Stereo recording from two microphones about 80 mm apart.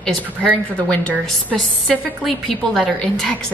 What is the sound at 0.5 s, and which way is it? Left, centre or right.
A woman's voice, centre.